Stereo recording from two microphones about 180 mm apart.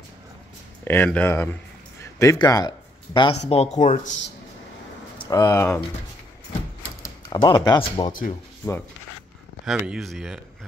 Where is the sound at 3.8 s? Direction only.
45° left (ahead or behind).